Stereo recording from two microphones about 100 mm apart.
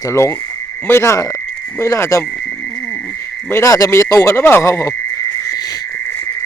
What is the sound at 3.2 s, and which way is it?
Speech, 25° left (ahead or behind).